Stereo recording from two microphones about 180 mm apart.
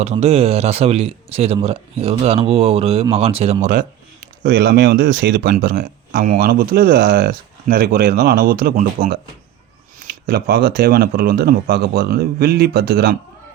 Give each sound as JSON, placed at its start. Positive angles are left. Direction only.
{"t": 0.0, "sound": "speech", "side_deg": -35}
{"t": 4.4, "sound": "speech", "side_deg": -60}
{"t": 10.1, "sound": "speech", "side_deg": -65}